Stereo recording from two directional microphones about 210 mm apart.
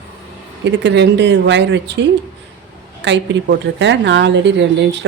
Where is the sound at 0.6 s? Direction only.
55° right (ahead or behind).